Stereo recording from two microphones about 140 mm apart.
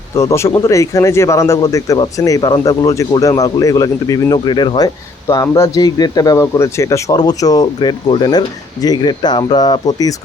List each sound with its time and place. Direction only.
0.2 s speech: 20° left (ahead or behind)
5.3 s speech: 20° left (ahead or behind)